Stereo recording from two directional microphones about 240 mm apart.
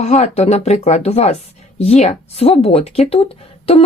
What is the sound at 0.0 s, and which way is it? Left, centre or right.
Speech, left.